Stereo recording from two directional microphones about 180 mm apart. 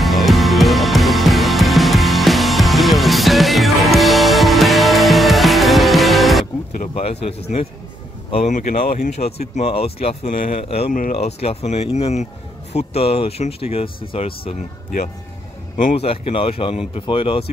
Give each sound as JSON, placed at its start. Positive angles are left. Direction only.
{"t": 0.0, "sound": "music", "side_deg": 0}
{"t": 7.0, "sound": "speech", "side_deg": 35}
{"t": 10.3, "sound": "speech", "side_deg": 45}
{"t": 10.6, "sound": "speech", "side_deg": 35}
{"t": 15.8, "sound": "speech", "side_deg": 45}
{"t": 16.1, "sound": "speech", "side_deg": 30}